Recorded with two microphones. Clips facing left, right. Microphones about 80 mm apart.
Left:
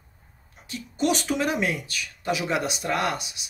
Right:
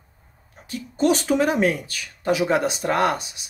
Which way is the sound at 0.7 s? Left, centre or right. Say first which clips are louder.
Right 5 dB; right.